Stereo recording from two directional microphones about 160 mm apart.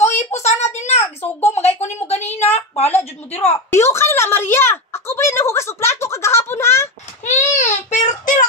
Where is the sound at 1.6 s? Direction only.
45° left (ahead or behind).